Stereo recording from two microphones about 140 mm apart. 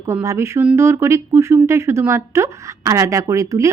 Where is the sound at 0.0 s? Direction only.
20° right (ahead or behind).